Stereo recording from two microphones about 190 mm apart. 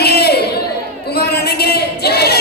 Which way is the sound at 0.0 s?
55° left (ahead or behind).